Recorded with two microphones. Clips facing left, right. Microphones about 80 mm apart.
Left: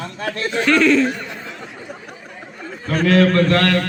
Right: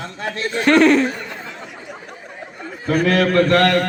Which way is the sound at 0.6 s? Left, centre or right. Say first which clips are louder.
Right 2 dB; right.